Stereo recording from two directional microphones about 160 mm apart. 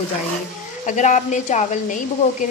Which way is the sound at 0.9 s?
50° left (ahead or behind).